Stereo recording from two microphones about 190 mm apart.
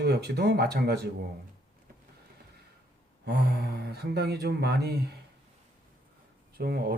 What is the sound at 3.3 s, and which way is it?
Speech, 60° right (ahead or behind).